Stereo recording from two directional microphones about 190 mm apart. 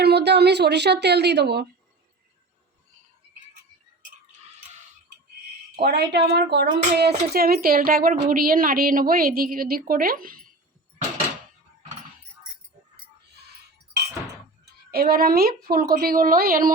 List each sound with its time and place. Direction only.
0.0 s a woman's voice: 60° right (ahead or behind)
5.7 s speech: 60° right (ahead or behind)
14.6 s speech: 55° right (ahead or behind)